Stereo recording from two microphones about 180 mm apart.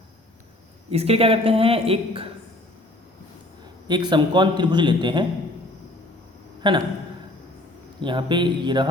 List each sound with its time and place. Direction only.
0.9 s speech: 35° right (ahead or behind)
3.8 s a man's voice: 25° right (ahead or behind)
6.6 s speech: 25° right (ahead or behind)
8.0 s a man's voice: 25° right (ahead or behind)